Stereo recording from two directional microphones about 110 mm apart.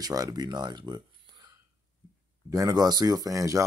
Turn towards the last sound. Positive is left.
turn(degrees=-30)  # may be behind; listen again after turning